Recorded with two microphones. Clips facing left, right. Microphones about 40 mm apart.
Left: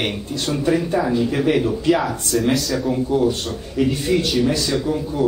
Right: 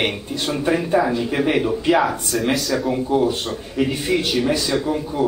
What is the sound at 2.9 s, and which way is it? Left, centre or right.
A man's voice, centre.